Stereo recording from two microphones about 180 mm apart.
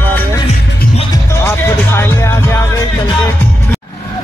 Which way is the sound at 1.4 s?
15° left (ahead or behind).